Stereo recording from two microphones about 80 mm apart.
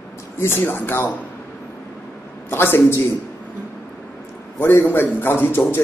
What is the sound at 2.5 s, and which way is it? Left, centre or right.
Speech, left.